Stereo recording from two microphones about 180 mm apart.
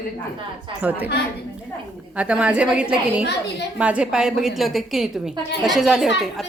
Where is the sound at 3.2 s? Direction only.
70° left (ahead or behind).